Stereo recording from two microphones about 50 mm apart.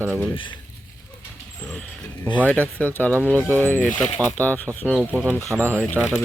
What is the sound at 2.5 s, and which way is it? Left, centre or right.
Speech, left.